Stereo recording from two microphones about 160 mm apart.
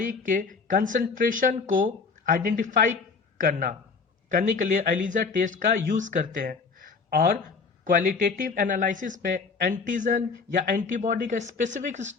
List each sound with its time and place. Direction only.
0.0 s speech: 55° right (ahead or behind)